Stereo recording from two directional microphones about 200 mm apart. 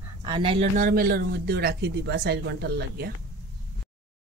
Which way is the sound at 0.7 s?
45° right (ahead or behind).